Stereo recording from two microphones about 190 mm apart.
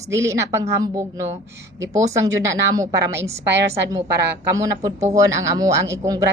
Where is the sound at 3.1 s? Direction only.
70° right (ahead or behind).